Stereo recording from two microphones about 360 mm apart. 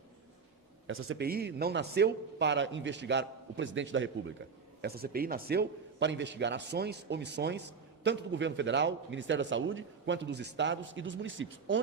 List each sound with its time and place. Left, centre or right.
0.9 s a man's voice: right